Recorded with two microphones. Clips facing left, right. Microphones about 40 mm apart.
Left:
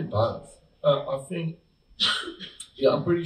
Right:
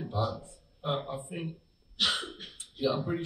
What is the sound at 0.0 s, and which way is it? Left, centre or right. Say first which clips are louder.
Speech: left 7 dB; left.